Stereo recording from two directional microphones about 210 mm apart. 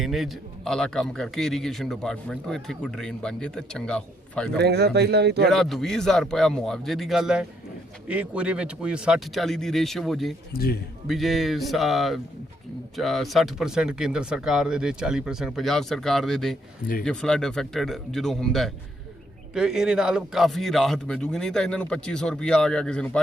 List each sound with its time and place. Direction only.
0.0 s a man's voice: centre (ahead or behind)
4.5 s speech: 50° right (ahead or behind)
5.5 s a man's voice: centre (ahead or behind)
10.5 s a man's voice: 45° left (ahead or behind)
11.1 s a man's voice: centre (ahead or behind)